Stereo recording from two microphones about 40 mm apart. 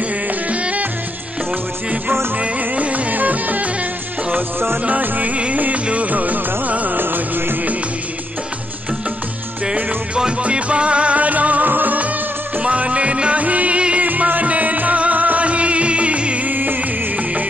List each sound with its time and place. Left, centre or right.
0.3 s music: right
2.3 s music: right
4.4 s music: right
5.0 s music: right
5.3 s music: right
7.0 s music: right
10.4 s music: right
12.6 s music: right
14.0 s music: right
16.4 s music: right